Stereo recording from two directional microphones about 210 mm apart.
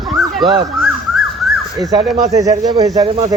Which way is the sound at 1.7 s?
15° right (ahead or behind).